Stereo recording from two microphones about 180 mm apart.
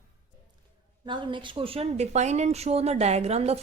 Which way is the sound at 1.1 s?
25° right (ahead or behind).